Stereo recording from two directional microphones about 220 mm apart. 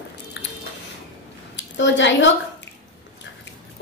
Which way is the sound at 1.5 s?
55° left (ahead or behind).